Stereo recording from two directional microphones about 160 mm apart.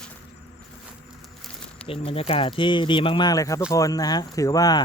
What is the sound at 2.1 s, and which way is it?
Speech, 35° left (ahead or behind).